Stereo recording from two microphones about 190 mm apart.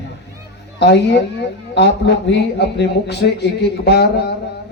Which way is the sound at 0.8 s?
60° left (ahead or behind).